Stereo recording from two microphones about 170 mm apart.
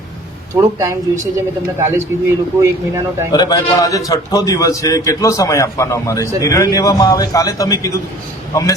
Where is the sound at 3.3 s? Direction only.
25° left (ahead or behind).